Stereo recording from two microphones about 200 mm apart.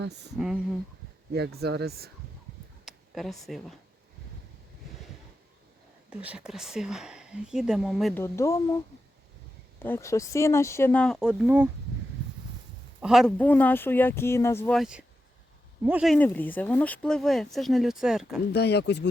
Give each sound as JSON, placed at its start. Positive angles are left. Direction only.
{"t": 0.3, "sound": "speech", "side_deg": -5}
{"t": 1.3, "sound": "speech", "side_deg": -55}
{"t": 2.8, "sound": "speech", "side_deg": 0}
{"t": 6.1, "sound": "speech", "side_deg": -5}
{"t": 8.1, "sound": "speech", "side_deg": 15}
{"t": 9.8, "sound": "speech", "side_deg": 15}
{"t": 13.0, "sound": "speech", "side_deg": 0}
{"t": 14.8, "sound": "speech", "side_deg": -5}
{"t": 16.1, "sound": "speech", "side_deg": 10}
{"t": 18.5, "sound": "speech", "side_deg": 55}